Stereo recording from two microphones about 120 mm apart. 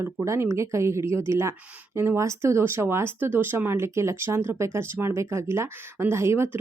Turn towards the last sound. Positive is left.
turn(degrees=-20)  # may be behind; listen again after turning